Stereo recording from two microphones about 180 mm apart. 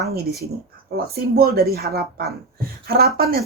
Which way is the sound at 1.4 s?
60° right (ahead or behind).